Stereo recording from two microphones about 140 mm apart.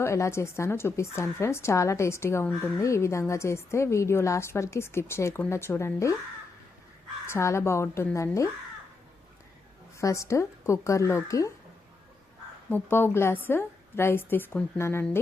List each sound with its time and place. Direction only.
0.0 s a woman's voice: 20° left (ahead or behind)
7.3 s a woman's voice: 20° left (ahead or behind)
10.0 s a woman's voice: 20° left (ahead or behind)
12.7 s a woman's voice: 15° left (ahead or behind)